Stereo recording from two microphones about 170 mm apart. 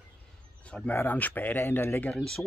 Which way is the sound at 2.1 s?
Centre (ahead or behind).